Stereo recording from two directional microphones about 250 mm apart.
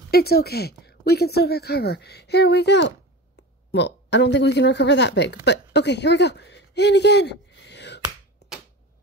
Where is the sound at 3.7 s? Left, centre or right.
Left.